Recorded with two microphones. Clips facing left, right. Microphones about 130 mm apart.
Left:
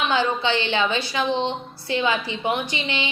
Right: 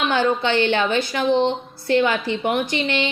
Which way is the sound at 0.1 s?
50° right (ahead or behind).